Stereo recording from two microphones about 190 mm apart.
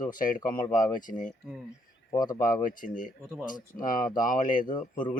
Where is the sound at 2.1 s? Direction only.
20° left (ahead or behind).